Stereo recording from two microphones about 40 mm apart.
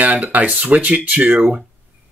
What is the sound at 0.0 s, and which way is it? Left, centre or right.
Speech, right.